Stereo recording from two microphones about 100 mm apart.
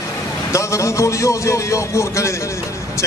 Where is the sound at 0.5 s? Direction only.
30° left (ahead or behind).